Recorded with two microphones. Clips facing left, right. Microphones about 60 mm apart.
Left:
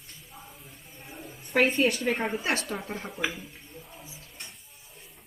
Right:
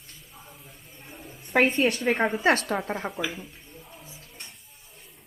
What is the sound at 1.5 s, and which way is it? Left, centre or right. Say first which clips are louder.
Speech: right 2 dB; right.